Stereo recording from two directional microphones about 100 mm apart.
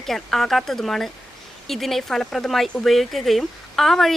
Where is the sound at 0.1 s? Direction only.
5° left (ahead or behind).